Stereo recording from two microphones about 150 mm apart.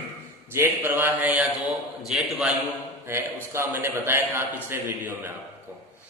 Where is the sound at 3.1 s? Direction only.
15° right (ahead or behind).